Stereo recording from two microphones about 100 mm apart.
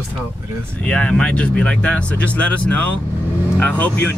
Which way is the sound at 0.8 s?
10° left (ahead or behind).